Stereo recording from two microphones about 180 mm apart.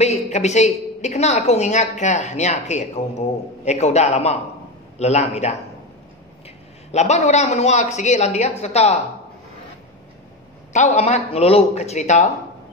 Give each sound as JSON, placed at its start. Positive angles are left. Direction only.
{"t": 0.0, "sound": "a woman's voice", "side_deg": 40}
{"t": 6.9, "sound": "a woman's voice", "side_deg": 40}
{"t": 10.7, "sound": "a woman's voice", "side_deg": 40}